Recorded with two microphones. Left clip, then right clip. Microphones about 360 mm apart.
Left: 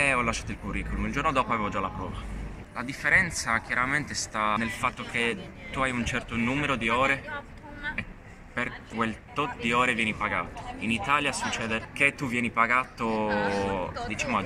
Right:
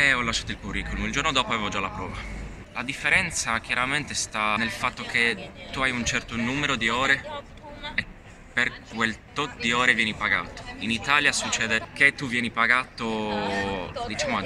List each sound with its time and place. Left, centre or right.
0.0 s speech: centre
8.5 s speech: centre
13.3 s mantra: centre
13.6 s speech: centre